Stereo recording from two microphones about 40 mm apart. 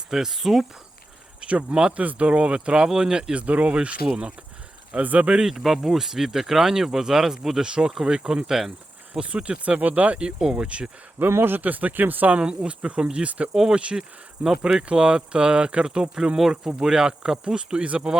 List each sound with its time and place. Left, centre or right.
0.1 s speech: centre
1.4 s speech: right
3.3 s speech: right
5.5 s speech: centre
9.2 s speech: right
10.2 s speech: centre
11.3 s speech: right
12.3 s speech: right
13.2 s speech: right
13.5 s speech: centre
16.4 s speech: centre; by 18.2 s right